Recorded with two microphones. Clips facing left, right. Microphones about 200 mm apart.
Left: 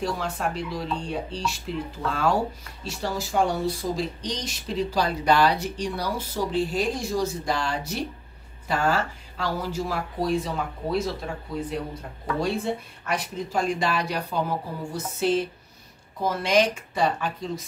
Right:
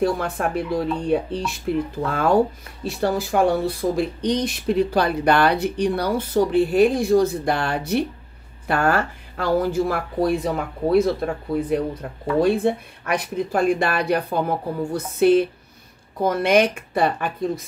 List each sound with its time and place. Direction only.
0.0 s speech: 55° right (ahead or behind)